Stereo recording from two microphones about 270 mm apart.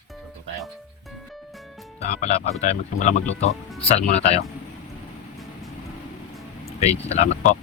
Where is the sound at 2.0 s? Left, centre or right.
Left.